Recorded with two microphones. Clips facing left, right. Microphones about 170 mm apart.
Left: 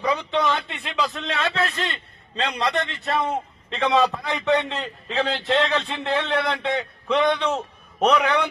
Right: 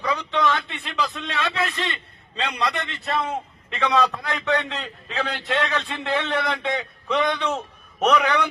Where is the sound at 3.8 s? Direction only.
20° left (ahead or behind).